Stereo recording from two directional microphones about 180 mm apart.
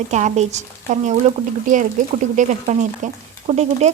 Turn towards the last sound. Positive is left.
turn(degrees=-35)  # may be behind; listen again after turning